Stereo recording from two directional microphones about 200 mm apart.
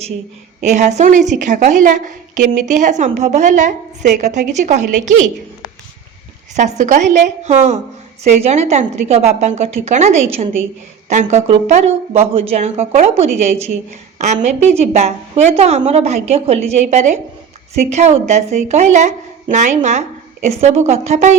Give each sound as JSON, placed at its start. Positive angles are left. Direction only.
{"t": 0.6, "sound": "a woman's voice", "side_deg": -35}
{"t": 6.5, "sound": "a woman's voice", "side_deg": -35}
{"t": 14.8, "sound": "a woman's voice", "side_deg": -30}